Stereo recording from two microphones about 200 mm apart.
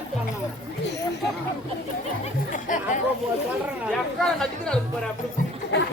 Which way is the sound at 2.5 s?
40° left (ahead or behind).